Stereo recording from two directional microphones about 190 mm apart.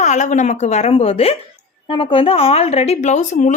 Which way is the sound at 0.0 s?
40° left (ahead or behind).